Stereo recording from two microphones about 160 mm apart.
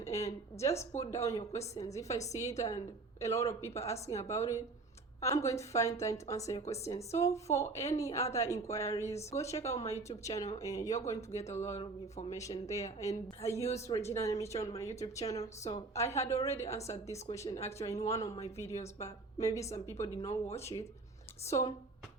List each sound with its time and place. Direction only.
0.0 s a woman's voice: 20° left (ahead or behind)